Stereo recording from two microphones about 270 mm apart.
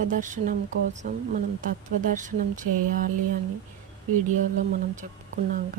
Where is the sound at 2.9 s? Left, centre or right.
Right.